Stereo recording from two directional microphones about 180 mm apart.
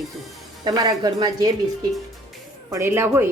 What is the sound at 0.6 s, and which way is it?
Speech, 25° right (ahead or behind).